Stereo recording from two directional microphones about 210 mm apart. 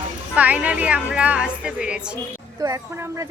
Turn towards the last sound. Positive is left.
turn(degrees=-15)  # may be behind; listen again after turning